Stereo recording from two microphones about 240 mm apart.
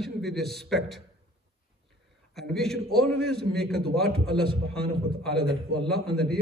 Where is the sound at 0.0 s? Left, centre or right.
Centre.